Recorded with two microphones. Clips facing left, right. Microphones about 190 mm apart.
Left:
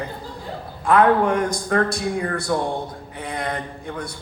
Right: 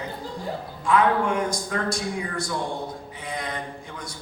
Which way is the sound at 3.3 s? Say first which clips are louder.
Left 5 dB; 60° left (ahead or behind).